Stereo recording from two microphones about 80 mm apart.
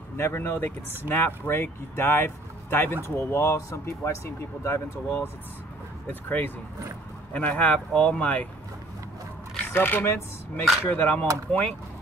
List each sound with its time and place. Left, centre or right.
0.2 s speech: left
9.7 s speech: left
11.5 s speech: centre